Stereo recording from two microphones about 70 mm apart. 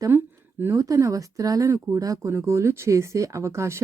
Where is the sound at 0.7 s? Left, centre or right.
Right.